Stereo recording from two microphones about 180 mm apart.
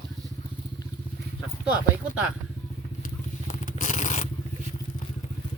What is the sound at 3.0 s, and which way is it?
Vehicle, 45° left (ahead or behind).